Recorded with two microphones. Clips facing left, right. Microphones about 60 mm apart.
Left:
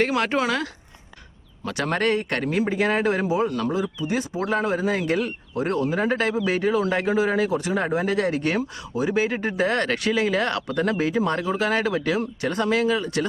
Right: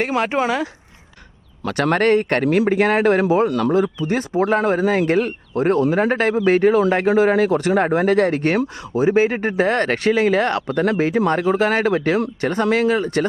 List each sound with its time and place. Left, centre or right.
0.3 s speech: centre
1.6 s a man's voice: right
4.0 s a man's voice: right